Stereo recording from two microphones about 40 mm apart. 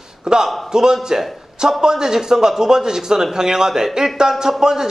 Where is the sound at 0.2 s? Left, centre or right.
Centre.